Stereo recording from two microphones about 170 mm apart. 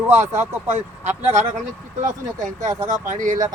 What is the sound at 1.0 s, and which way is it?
Speech, 45° right (ahead or behind).